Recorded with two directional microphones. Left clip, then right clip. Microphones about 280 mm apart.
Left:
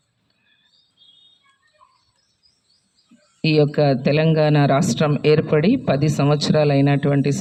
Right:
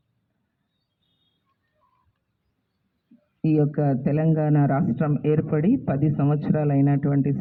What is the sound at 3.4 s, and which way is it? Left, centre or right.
A man's voice, left.